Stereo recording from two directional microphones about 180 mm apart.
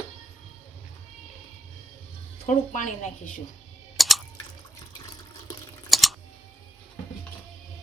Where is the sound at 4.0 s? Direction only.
Centre (ahead or behind).